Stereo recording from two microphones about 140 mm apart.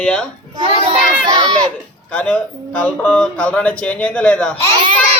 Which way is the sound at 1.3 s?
30° right (ahead or behind).